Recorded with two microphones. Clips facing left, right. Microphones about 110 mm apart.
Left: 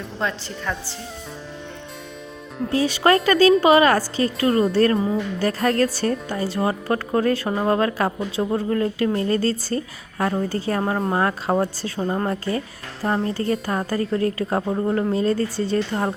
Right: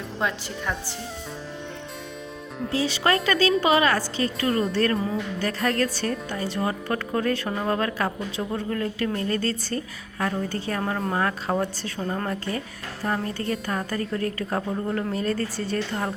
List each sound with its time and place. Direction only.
0.2 s speech: 10° right (ahead or behind)
2.7 s speech: 45° left (ahead or behind)